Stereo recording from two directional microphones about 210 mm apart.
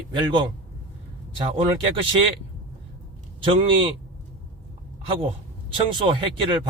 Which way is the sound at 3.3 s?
25° right (ahead or behind).